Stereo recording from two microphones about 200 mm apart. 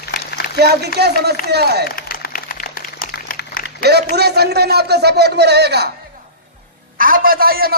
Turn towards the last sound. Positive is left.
turn(degrees=-50)  # may be behind; listen again after turning